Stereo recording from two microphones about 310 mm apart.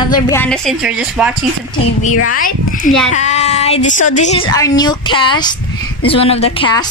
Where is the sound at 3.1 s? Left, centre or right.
Left.